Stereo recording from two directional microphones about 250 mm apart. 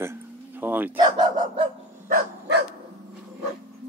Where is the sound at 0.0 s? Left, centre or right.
Centre.